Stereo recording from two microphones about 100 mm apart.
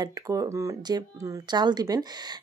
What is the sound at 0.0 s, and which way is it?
A woman's voice, 35° right (ahead or behind).